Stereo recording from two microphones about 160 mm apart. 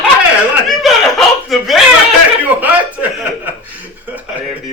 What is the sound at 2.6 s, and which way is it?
Chuckle, 10° right (ahead or behind).